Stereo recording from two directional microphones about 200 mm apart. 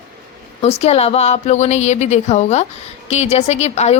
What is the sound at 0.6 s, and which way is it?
Speech, 30° left (ahead or behind).